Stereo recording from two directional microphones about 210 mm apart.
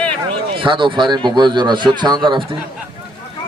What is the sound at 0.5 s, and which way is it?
A man's voice, 25° right (ahead or behind).